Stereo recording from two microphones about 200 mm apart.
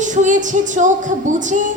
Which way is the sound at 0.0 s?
40° right (ahead or behind).